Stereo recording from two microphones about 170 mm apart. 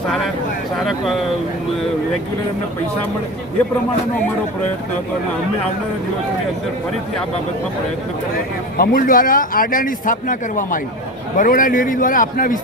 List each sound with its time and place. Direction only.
0.9 s speech: centre (ahead or behind)
8.8 s a man's voice: 55° left (ahead or behind)